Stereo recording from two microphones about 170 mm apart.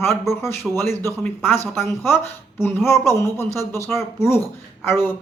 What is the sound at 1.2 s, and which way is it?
Speech, 10° left (ahead or behind).